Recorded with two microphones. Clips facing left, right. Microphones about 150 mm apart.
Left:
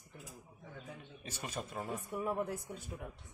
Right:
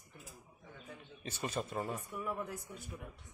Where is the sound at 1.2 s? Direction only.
10° left (ahead or behind).